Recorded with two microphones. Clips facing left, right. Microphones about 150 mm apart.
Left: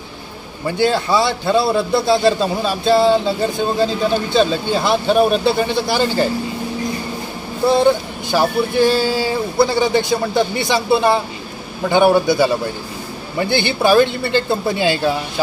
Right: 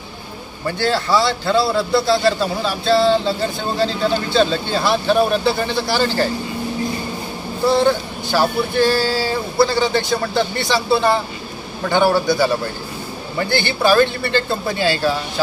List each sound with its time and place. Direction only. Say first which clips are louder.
0.7 s a man's voice: left 2 dB; 15° left (ahead or behind)
7.8 s a man's voice: left 2 dB; 15° left (ahead or behind)